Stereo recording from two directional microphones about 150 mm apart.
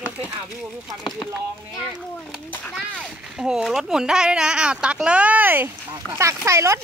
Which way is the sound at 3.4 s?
5° right (ahead or behind).